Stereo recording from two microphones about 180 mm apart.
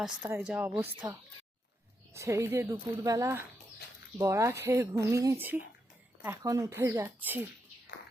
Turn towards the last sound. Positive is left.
turn(degrees=-10)  # may be behind; listen again after turning